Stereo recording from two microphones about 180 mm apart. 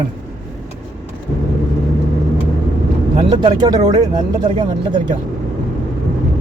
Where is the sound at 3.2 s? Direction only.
25° right (ahead or behind).